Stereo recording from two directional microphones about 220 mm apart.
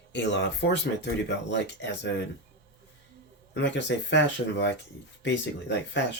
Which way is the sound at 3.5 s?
50° left (ahead or behind).